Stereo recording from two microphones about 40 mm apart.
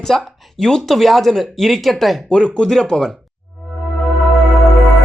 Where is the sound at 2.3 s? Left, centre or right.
Left.